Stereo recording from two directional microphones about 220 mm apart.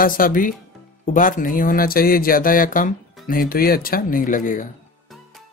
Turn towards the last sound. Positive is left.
turn(degrees=35)  # may be behind; listen again after turning